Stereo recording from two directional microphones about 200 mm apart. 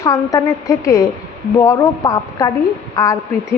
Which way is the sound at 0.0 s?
15° left (ahead or behind).